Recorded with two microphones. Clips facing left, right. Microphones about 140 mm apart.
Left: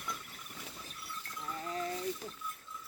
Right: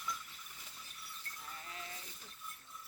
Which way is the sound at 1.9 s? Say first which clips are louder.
Left 16 dB; 90° left.